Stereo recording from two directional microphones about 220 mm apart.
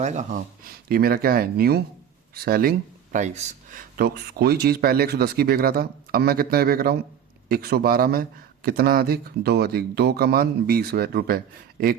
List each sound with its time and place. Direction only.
0.0 s speech: 35° right (ahead or behind)